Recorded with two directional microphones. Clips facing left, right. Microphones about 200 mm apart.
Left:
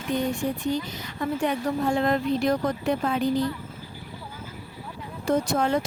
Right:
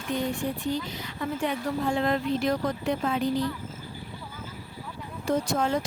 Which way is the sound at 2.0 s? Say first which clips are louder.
Left 2 dB; 45° left (ahead or behind).